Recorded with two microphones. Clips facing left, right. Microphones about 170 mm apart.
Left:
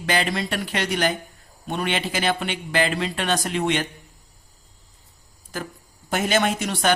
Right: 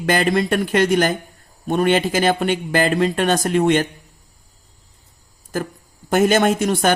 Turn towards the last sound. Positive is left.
turn(degrees=-45)  # may be behind; listen again after turning